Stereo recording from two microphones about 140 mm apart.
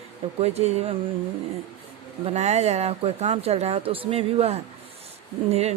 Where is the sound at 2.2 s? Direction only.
50° right (ahead or behind).